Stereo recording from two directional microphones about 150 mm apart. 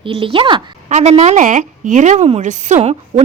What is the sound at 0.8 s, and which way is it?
A woman's voice, 50° right (ahead or behind).